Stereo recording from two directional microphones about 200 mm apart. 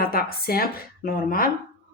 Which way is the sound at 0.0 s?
50° left (ahead or behind).